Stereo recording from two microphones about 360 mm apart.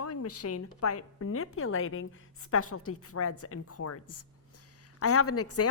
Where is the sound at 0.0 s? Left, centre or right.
Left.